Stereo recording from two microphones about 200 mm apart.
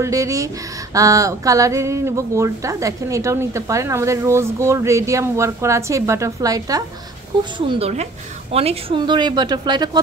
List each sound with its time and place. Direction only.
0.0 s a woman's voice: 15° right (ahead or behind)